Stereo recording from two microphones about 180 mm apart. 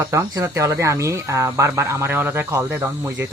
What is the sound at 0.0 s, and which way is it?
Speech, 15° right (ahead or behind).